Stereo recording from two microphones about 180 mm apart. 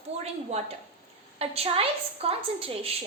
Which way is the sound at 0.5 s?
35° right (ahead or behind).